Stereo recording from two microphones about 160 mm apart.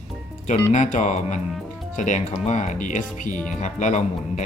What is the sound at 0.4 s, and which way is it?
Speech, 50° left (ahead or behind).